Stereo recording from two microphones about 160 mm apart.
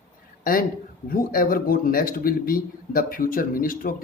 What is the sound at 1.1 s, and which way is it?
Speech, 65° left (ahead or behind).